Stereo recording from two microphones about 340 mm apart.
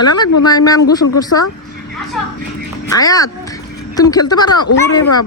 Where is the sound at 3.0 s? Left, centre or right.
Centre.